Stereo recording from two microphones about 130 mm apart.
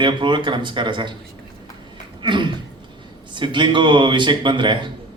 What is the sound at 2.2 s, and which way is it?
A man's voice, 40° right (ahead or behind).